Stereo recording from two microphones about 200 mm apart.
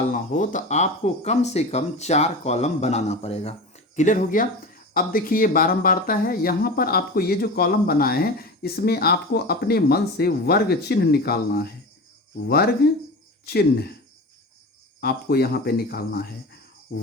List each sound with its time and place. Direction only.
0.1 s speech: 40° left (ahead or behind)
13.4 s speech: 55° left (ahead or behind)
15.0 s speech: 50° left (ahead or behind)
16.9 s cricket: 50° left (ahead or behind)